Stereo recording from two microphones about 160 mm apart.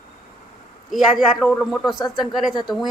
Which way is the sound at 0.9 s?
Centre (ahead or behind).